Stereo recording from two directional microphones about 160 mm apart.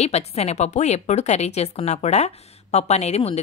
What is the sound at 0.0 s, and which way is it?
A woman's voice, 40° left (ahead or behind).